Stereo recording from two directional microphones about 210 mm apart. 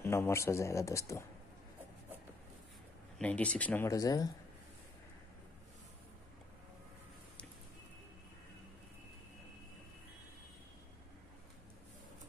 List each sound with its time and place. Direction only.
0.0 s a man's voice: 10° left (ahead or behind)
3.2 s a man's voice: 5° left (ahead or behind)